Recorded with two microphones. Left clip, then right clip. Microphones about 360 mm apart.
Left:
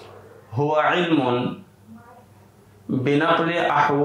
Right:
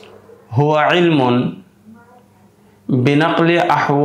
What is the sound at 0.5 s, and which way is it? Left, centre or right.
Speech, right.